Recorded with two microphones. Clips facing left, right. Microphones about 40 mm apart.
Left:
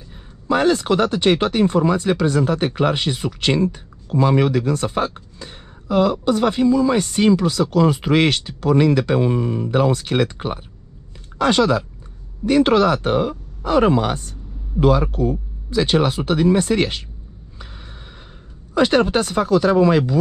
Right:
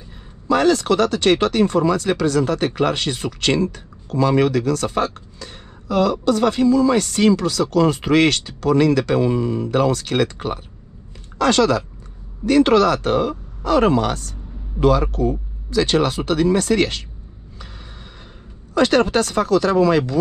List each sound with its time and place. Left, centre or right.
0.5 s speech: centre
9.2 s speech: left
14.8 s speech: centre
18.8 s speech: centre